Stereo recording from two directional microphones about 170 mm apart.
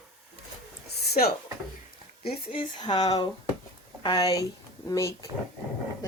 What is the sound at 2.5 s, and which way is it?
Speech, 25° left (ahead or behind).